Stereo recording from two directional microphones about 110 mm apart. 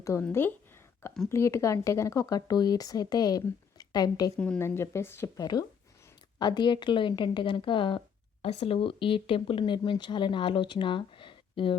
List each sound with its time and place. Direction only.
0.0 s a sound: 25° left (ahead or behind)
1.3 s speech: 25° left (ahead or behind)
4.4 s a woman's voice: 10° left (ahead or behind)
4.6 s speech: 25° left (ahead or behind)
6.4 s speech: 40° left (ahead or behind)
8.4 s speech: 60° left (ahead or behind)